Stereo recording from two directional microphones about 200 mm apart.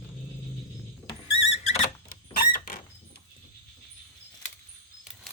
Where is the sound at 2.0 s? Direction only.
45° left (ahead or behind).